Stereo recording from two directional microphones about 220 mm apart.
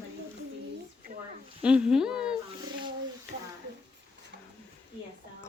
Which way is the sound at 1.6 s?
5° right (ahead or behind).